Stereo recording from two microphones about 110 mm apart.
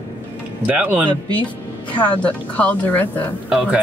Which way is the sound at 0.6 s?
15° right (ahead or behind).